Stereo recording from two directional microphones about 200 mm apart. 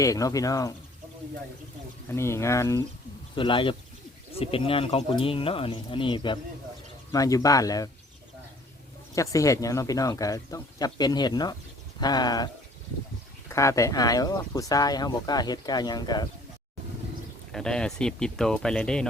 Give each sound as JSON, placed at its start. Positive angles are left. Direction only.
{"t": 0.0, "sound": "speech", "side_deg": 15}
{"t": 2.0, "sound": "speech", "side_deg": 15}
{"t": 3.3, "sound": "speech", "side_deg": 25}
{"t": 9.1, "sound": "speech", "side_deg": 15}
{"t": 13.5, "sound": "speech", "side_deg": 15}
{"t": 17.5, "sound": "speech", "side_deg": 5}